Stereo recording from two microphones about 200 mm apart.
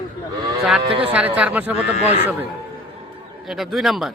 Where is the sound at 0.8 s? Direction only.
30° right (ahead or behind).